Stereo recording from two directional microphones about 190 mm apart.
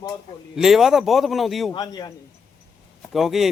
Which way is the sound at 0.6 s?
Centre (ahead or behind).